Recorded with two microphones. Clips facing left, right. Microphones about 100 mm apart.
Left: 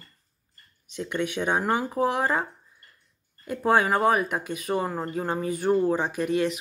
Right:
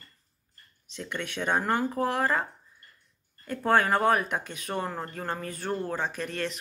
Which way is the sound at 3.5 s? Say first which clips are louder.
Left 2 dB; 10° left (ahead or behind).